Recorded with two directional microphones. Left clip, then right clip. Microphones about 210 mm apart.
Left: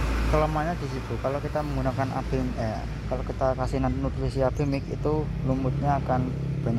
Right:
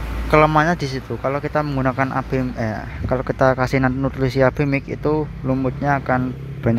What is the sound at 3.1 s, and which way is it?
Speech, 35° right (ahead or behind).